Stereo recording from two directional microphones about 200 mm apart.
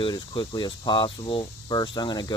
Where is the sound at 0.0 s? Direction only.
20° left (ahead or behind).